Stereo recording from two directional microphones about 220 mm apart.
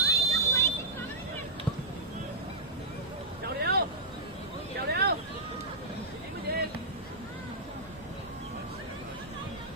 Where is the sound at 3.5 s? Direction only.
45° right (ahead or behind).